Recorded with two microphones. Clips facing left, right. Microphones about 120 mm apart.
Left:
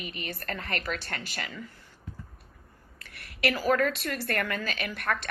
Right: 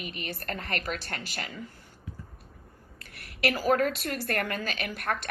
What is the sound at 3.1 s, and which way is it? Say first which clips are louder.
A woman's voice: even; 45° right (ahead or behind).